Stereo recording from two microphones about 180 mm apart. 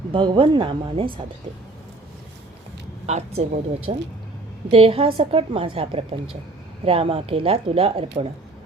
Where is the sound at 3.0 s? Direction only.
35° right (ahead or behind).